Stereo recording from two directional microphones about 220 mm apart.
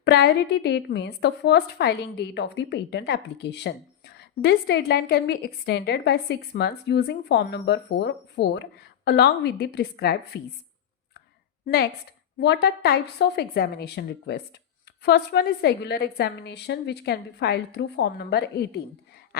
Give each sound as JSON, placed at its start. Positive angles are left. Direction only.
{"t": 0.0, "sound": "a woman's voice", "side_deg": 50}
{"t": 11.6, "sound": "a woman's voice", "side_deg": 45}